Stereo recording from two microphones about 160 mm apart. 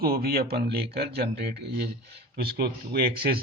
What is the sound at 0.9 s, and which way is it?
Speech, 90° right.